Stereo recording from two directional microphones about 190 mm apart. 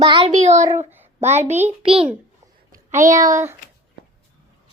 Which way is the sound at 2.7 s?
40° right (ahead or behind).